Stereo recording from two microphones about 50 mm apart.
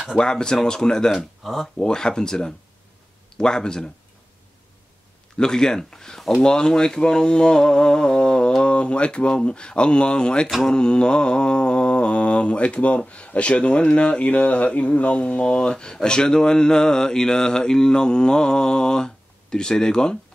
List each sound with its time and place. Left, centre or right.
0.2 s mantra: centre
1.8 s mantra: centre
5.4 s mantra: centre